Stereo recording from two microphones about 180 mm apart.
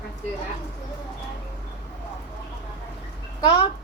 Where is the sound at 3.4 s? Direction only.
25° left (ahead or behind).